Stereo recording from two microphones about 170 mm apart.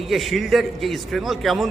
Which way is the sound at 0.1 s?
Centre (ahead or behind).